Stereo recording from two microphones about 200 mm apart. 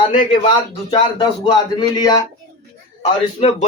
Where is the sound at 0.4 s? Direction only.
25° left (ahead or behind).